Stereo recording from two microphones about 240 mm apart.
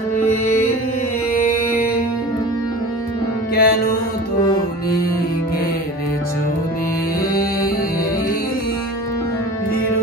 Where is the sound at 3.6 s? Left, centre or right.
Left.